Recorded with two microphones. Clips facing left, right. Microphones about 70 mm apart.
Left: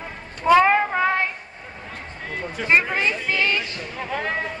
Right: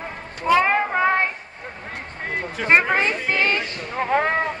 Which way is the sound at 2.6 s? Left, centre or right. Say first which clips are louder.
Right 2 dB; right.